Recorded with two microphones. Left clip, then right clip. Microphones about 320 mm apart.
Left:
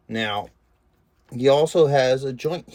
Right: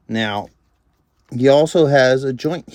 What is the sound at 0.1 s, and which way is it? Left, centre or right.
Speech, right.